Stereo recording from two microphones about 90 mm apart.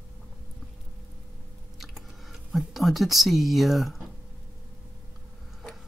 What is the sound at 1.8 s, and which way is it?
Whispering, centre (ahead or behind).